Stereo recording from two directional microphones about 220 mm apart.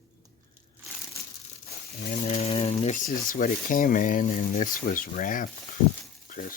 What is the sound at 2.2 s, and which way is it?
Speech, 25° left (ahead or behind).